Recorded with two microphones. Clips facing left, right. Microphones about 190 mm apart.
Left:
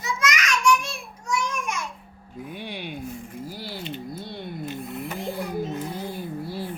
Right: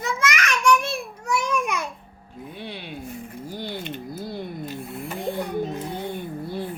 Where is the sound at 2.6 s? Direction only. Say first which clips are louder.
Even; 10° left (ahead or behind).